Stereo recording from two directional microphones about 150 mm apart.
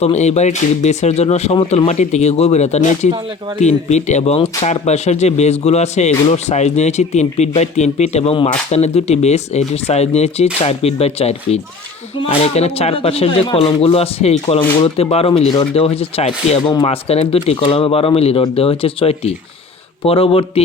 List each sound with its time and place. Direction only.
0.0 s speech: 50° left (ahead or behind)